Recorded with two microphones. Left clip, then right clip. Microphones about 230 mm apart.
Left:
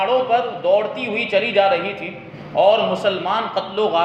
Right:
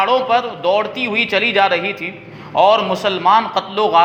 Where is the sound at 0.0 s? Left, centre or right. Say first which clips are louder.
Right 3 dB; right.